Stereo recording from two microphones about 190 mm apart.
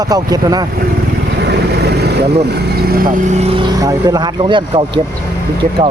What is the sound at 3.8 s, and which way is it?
Speech, 20° right (ahead or behind).